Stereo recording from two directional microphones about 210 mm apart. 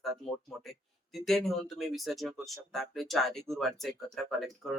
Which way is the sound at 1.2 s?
Centre (ahead or behind).